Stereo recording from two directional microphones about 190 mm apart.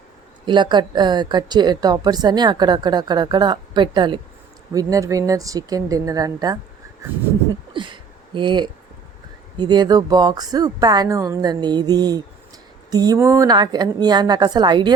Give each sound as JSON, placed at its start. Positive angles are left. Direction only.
{"t": 0.4, "sound": "a woman's voice", "side_deg": -25}
{"t": 7.7, "sound": "a sound", "side_deg": -25}
{"t": 9.6, "sound": "a woman's voice", "side_deg": -20}